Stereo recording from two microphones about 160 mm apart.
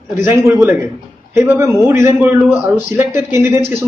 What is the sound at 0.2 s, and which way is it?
A man's voice, 10° right (ahead or behind).